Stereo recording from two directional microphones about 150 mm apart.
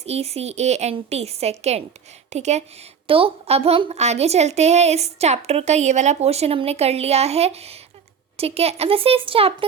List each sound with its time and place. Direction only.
0.0 s a woman's voice: 45° right (ahead or behind)
3.1 s a woman's voice: 35° right (ahead or behind)